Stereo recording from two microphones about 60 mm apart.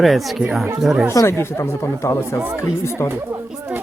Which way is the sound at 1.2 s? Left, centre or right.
Left.